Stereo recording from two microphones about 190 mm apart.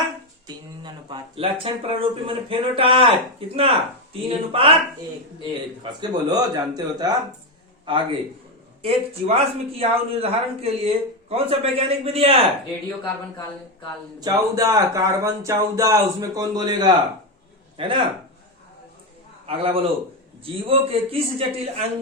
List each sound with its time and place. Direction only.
0.4 s speech: 20° right (ahead or behind)
5.8 s speech: 20° right (ahead or behind)
14.2 s a man's voice: 20° right (ahead or behind)
19.5 s speech: 30° right (ahead or behind)